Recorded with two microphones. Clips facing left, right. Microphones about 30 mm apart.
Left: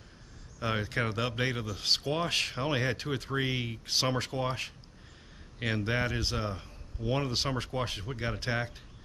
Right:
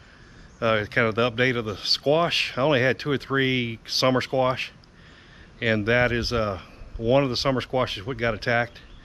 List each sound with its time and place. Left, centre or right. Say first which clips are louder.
0.6 s speech: right 10 dB; right